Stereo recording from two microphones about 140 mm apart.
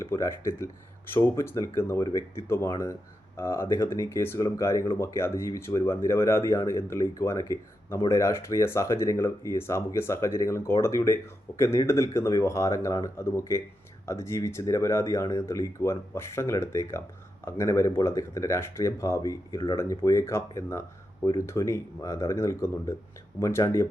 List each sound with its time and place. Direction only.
0.0 s speech: 20° left (ahead or behind)